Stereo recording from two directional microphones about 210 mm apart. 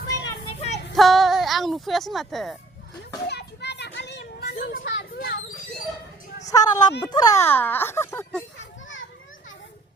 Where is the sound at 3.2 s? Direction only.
50° left (ahead or behind).